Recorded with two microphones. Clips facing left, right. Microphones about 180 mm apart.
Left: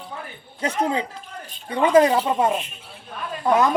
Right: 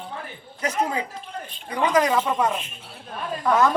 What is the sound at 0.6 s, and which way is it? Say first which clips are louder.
Speech: left 2 dB; 30° left (ahead or behind).